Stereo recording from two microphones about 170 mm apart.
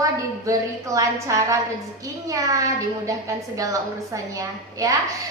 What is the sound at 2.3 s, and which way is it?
Child singing, 20° right (ahead or behind).